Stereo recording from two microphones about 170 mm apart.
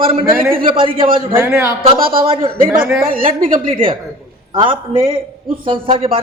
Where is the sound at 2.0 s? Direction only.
60° right (ahead or behind).